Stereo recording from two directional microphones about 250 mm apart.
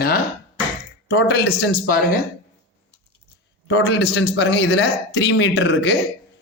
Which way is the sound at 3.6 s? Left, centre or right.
Left.